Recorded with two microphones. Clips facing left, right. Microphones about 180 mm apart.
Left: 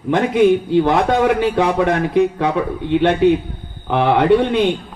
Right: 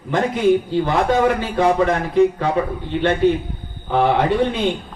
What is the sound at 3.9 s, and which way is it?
Speech, 65° left (ahead or behind).